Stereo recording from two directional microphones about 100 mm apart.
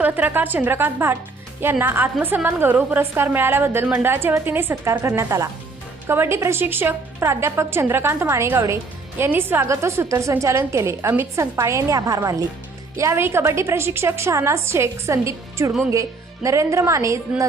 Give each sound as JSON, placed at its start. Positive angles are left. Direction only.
{"t": 0.0, "sound": "a woman's voice", "side_deg": -15}